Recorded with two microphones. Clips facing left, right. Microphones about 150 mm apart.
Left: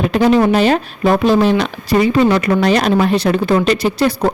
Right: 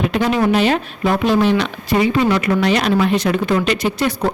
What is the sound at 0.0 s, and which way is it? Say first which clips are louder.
Speech: left 5 dB; 35° left (ahead or behind).